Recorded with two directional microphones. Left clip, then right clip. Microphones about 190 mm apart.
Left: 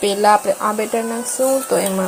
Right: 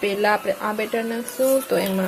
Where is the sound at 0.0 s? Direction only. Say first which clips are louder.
Left 6 dB; 15° left (ahead or behind).